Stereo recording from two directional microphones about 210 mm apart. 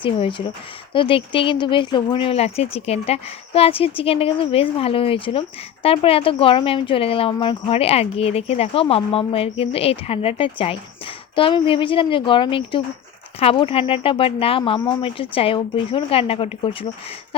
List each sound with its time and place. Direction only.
0.0 s speech: 25° left (ahead or behind)